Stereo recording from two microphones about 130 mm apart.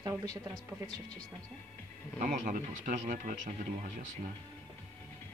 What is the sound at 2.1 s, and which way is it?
Speech, 80° right.